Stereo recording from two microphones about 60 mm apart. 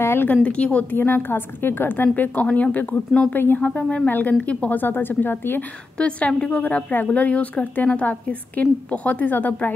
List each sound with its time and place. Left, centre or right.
0.0 s a sound: left
0.3 s a woman's voice: left
0.9 s a woman's voice: left
3.6 s speech: centre
4.1 s a woman's voice: left
5.9 s a woman's voice: centre